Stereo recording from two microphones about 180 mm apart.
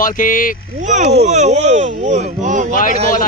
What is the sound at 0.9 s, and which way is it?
Speech, 40° right (ahead or behind).